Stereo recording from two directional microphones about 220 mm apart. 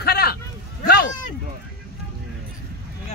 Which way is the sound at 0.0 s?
45° left (ahead or behind).